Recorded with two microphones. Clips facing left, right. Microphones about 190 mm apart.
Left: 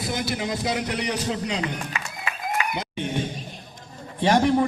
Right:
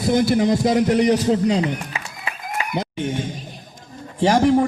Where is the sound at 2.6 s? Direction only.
35° right (ahead or behind).